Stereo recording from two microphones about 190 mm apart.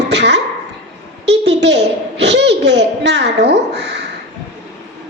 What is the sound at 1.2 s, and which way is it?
A child's voice, 65° right (ahead or behind).